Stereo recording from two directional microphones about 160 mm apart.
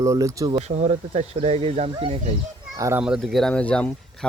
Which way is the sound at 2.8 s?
20° right (ahead or behind).